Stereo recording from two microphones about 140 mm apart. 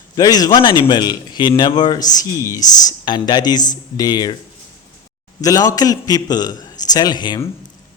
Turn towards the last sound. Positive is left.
turn(degrees=30)  # may be behind; listen again after turning